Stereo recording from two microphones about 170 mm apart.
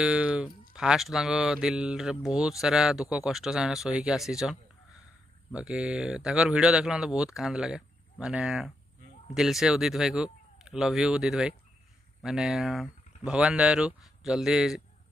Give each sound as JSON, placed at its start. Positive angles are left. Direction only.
{"t": 0.0, "sound": "speech", "side_deg": -5}